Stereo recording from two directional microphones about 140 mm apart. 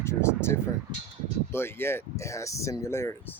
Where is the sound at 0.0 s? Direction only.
20° left (ahead or behind).